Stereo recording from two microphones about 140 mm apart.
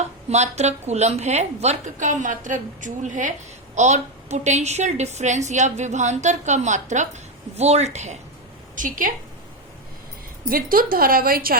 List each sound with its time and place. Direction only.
0.3 s a woman's voice: 55° right (ahead or behind)
8.7 s a woman's voice: 75° right (ahead or behind)
10.5 s a woman's voice: 90° right